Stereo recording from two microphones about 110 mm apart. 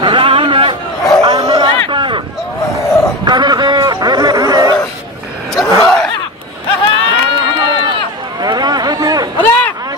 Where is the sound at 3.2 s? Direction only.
40° right (ahead or behind).